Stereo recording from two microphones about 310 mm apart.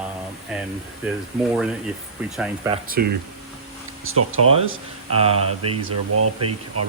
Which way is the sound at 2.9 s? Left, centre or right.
Right.